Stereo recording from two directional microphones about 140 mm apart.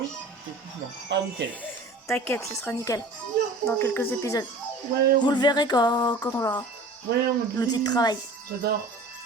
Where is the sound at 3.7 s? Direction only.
15° left (ahead or behind).